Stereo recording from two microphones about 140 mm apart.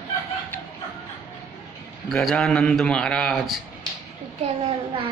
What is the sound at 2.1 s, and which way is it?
A man's voice, centre (ahead or behind).